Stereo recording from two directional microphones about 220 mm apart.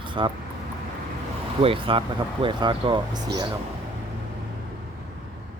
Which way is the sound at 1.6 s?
25° right (ahead or behind).